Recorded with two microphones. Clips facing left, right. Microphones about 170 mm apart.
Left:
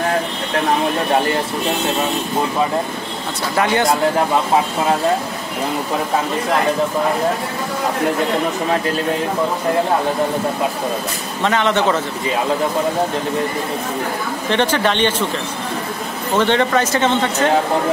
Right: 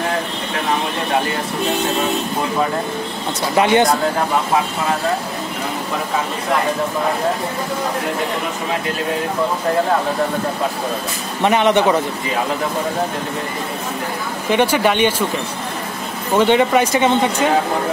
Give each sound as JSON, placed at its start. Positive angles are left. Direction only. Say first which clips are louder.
{"t": 3.5, "sound": "speech", "louder": "right 3 dB", "side_deg": -20}
{"t": 11.4, "sound": "speech", "louder": "right 3 dB", "side_deg": -15}
{"t": 14.5, "sound": "speech", "louder": "right 2 dB", "side_deg": -10}
{"t": 16.3, "sound": "speech", "louder": "right 2 dB", "side_deg": -15}